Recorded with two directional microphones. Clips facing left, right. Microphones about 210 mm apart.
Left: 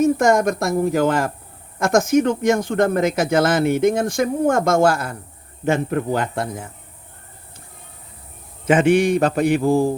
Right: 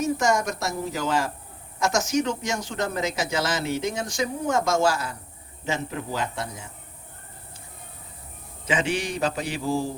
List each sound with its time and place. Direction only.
0.0 s speech: 55° left (ahead or behind)
8.6 s speech: 55° left (ahead or behind)